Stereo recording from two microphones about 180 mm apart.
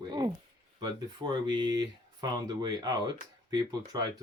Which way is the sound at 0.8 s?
25° right (ahead or behind).